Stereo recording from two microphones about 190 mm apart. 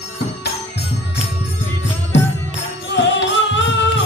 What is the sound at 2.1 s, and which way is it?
Music, 70° left (ahead or behind).